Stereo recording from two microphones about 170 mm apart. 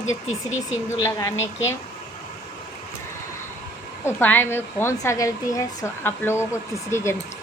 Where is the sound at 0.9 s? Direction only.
20° left (ahead or behind).